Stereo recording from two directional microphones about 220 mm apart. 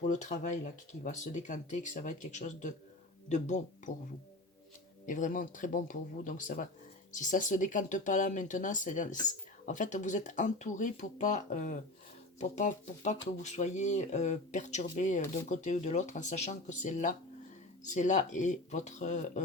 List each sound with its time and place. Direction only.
0.1 s speech: 35° left (ahead or behind)
5.0 s speech: 35° left (ahead or behind)